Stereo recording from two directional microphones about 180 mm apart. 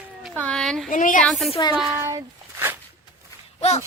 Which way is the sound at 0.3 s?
5° left (ahead or behind).